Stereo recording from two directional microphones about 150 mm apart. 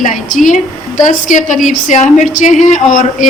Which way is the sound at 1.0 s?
55° left (ahead or behind).